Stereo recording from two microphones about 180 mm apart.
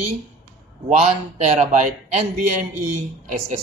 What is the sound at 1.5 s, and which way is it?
Speech, 40° right (ahead or behind).